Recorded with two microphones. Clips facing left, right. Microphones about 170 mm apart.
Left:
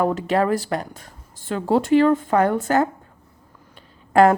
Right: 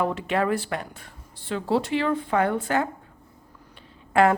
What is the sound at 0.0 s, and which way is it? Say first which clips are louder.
Speech: left 4 dB; 40° left (ahead or behind).